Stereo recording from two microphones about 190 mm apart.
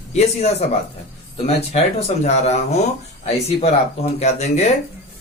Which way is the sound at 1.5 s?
35° left (ahead or behind).